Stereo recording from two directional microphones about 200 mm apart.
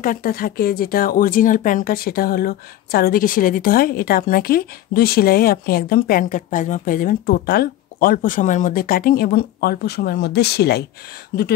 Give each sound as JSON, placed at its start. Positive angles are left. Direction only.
{"t": 0.0, "sound": "speech", "side_deg": 45}